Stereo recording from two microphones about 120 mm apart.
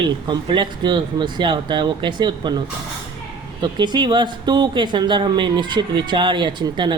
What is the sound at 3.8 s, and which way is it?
Speech, 40° right (ahead or behind).